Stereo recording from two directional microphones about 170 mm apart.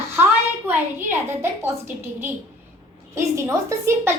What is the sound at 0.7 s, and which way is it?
A child's voice, 15° right (ahead or behind).